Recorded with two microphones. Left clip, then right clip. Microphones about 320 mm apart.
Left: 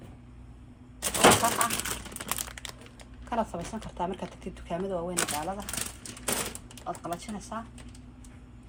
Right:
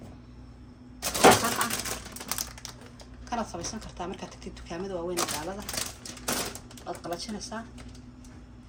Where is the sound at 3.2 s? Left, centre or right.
Left.